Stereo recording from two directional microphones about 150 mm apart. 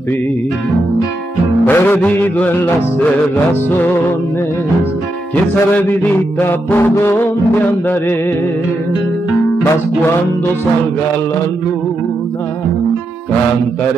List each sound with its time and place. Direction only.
1.7 s music: 15° left (ahead or behind)
3.7 s music: 15° left (ahead or behind)
5.3 s music: 10° left (ahead or behind)